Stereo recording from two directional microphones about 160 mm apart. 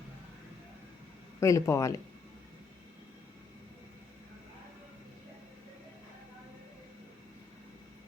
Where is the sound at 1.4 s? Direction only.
20° left (ahead or behind).